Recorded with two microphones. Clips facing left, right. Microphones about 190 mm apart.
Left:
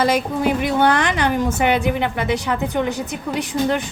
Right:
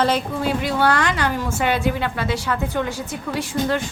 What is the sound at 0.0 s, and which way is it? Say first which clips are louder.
A woman's voice: left 2 dB; 15° left (ahead or behind).